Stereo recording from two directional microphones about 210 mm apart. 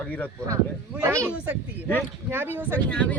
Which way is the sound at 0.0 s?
10° left (ahead or behind).